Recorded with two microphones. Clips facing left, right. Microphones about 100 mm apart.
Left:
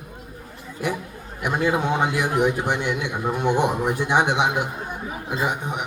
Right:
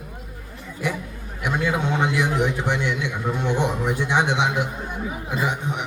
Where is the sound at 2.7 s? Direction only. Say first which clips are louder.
Even; 50° left (ahead or behind).